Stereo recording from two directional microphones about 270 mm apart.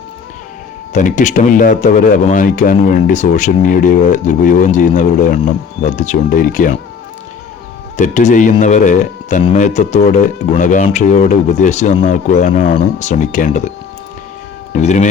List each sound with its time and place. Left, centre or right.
0.9 s speech: left
7.9 s speech: left
14.7 s speech: left